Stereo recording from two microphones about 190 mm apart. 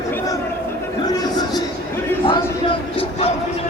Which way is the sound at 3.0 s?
30° left (ahead or behind).